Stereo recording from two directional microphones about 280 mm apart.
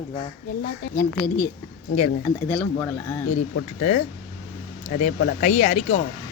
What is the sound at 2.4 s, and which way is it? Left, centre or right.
Speech, centre.